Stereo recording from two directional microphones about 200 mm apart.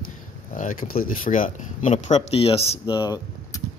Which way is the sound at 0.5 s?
40° left (ahead or behind).